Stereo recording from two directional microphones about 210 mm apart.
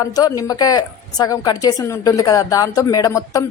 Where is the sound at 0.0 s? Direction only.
15° left (ahead or behind).